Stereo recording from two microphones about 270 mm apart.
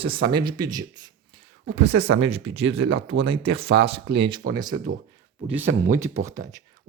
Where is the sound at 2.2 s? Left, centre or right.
Right.